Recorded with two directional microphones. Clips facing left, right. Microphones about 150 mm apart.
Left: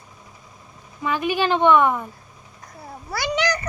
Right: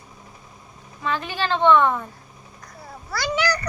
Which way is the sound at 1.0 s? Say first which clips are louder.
Left 4 dB; 15° left (ahead or behind).